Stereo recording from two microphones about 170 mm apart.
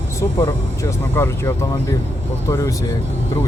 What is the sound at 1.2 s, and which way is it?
Speech, 15° left (ahead or behind).